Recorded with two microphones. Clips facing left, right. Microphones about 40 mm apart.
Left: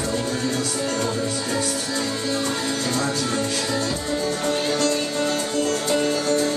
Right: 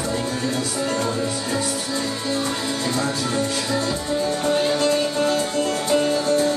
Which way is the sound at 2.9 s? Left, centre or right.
Centre.